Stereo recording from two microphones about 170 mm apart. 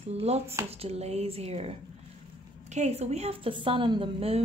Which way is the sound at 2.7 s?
40° right (ahead or behind).